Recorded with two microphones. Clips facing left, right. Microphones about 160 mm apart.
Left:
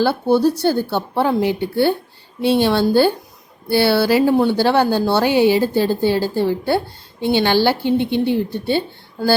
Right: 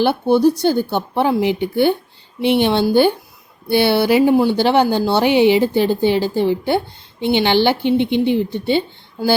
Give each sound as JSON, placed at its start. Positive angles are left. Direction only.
{"t": 0.0, "sound": "a woman's voice", "side_deg": -15}